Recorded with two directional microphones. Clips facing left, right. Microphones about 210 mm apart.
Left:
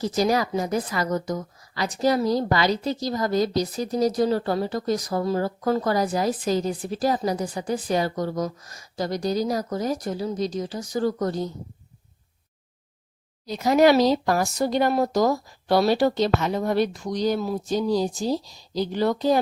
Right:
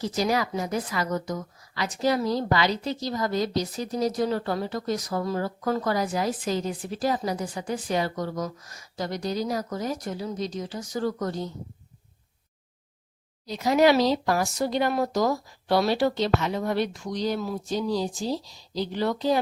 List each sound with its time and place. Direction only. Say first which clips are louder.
0.0 s a woman's voice: left 3 dB; 40° left (ahead or behind)
13.5 s speech: left 3 dB; 45° left (ahead or behind)